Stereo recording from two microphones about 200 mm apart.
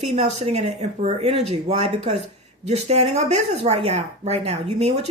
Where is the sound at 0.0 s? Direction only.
35° right (ahead or behind).